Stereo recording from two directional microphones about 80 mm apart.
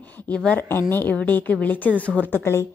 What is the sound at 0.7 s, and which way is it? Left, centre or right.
A woman's voice, left.